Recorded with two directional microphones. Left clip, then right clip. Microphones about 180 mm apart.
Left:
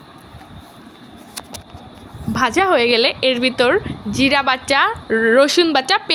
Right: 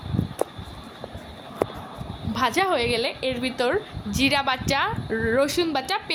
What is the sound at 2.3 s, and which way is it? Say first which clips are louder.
Speech: left 7 dB; 25° left (ahead or behind).